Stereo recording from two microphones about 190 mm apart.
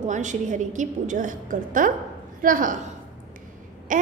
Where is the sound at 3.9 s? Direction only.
45° right (ahead or behind).